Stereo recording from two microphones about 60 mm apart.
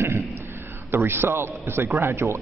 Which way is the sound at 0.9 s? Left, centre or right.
Right.